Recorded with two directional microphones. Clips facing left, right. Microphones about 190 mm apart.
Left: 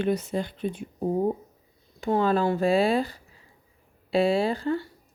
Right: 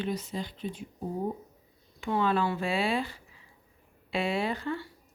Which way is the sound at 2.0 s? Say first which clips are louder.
Left 5 dB; 40° left (ahead or behind).